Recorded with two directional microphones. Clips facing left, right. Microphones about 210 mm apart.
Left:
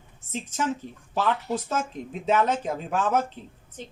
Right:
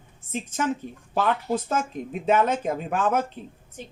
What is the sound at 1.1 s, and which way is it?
A woman's voice, 55° right (ahead or behind).